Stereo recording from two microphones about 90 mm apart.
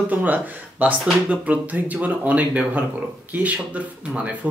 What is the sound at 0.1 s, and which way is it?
Speech, 20° right (ahead or behind).